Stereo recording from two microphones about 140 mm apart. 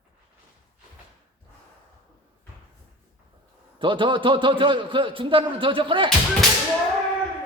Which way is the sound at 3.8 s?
35° right (ahead or behind).